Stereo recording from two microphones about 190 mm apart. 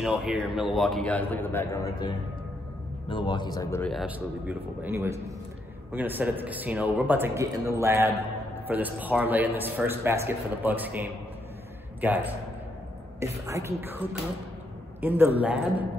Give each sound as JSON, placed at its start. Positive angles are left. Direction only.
{"t": 0.0, "sound": "a man's voice", "side_deg": 0}
{"t": 3.8, "sound": "a man's voice", "side_deg": 0}
{"t": 13.2, "sound": "a man's voice", "side_deg": -15}